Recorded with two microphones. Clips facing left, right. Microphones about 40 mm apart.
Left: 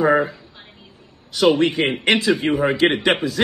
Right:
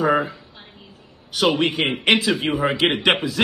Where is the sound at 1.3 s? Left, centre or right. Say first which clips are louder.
Left 3 dB; right.